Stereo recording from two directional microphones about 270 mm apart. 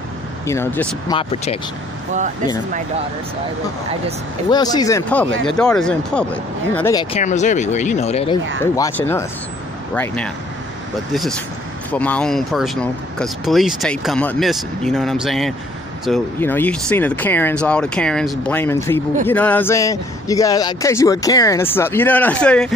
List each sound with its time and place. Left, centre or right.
0.5 s speech: centre
1.1 s speech: left
4.5 s speech: centre
7.2 s speech: left
8.7 s speech: centre